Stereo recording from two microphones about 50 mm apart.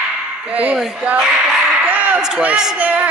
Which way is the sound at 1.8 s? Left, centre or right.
Right.